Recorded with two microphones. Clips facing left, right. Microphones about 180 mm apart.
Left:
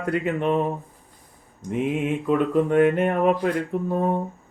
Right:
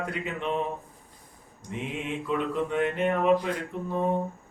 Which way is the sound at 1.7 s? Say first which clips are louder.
Left 9 dB; 50° left (ahead or behind).